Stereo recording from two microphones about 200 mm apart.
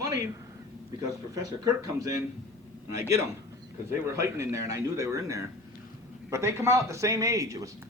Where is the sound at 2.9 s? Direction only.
15° right (ahead or behind).